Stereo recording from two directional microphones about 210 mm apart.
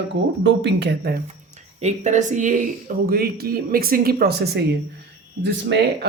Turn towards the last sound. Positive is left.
turn(degrees=-55)  # may be behind; listen again after turning